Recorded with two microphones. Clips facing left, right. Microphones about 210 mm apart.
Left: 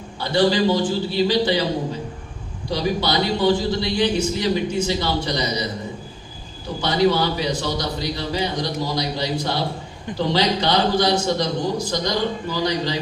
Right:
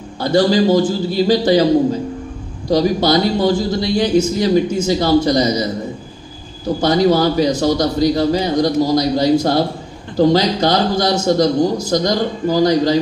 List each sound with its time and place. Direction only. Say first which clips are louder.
0.2 s a man's voice: right 5 dB; 40° right (ahead or behind)
2.7 s a man's voice: right 8 dB; 45° right (ahead or behind)
6.8 s a man's voice: right 5 dB; 45° right (ahead or behind)